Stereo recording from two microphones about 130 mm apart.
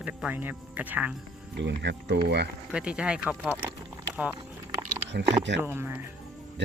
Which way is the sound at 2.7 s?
5° right (ahead or behind).